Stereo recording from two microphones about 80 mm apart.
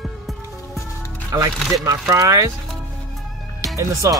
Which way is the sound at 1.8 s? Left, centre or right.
Right.